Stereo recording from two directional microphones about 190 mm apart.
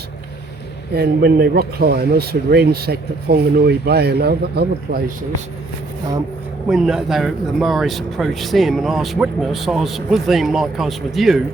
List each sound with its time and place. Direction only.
0.9 s speech: 55° right (ahead or behind)
6.7 s speech: 5° right (ahead or behind)